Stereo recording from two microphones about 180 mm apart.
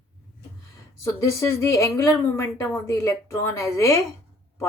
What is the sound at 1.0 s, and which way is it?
A woman's voice, 15° left (ahead or behind).